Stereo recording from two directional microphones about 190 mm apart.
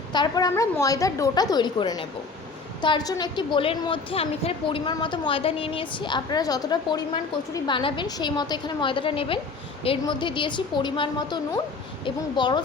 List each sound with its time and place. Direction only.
0.1 s a woman's voice: 20° left (ahead or behind)